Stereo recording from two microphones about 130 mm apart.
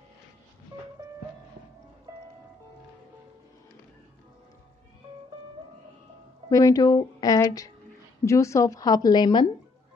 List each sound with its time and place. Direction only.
6.5 s a woman's voice: 30° left (ahead or behind)